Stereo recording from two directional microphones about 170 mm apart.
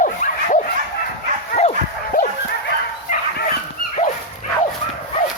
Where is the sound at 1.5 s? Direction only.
40° left (ahead or behind).